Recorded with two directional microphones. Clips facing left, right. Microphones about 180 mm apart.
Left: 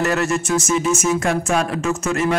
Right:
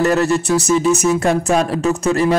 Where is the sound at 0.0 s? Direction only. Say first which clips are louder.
Right 5 dB; 35° right (ahead or behind).